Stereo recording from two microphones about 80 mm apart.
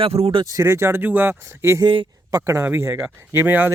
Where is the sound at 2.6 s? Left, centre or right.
Right.